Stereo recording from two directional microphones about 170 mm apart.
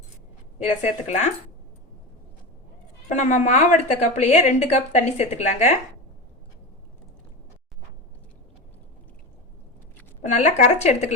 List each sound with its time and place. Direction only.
0.8 s a woman's voice: 45° left (ahead or behind)
3.1 s a woman's voice: 45° left (ahead or behind)
10.3 s speech: 40° left (ahead or behind)